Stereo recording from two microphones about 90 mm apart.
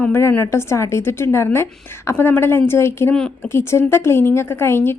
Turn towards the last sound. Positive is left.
turn(degrees=30)  # may be behind; listen again after turning